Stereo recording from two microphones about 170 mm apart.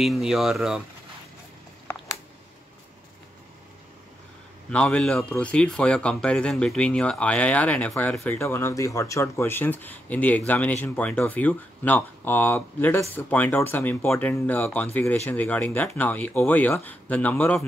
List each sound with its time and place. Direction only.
0.0 s speech: centre (ahead or behind)
4.6 s speech: 5° left (ahead or behind)